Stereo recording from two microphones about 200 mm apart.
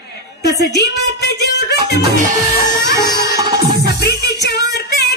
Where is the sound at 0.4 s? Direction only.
55° left (ahead or behind).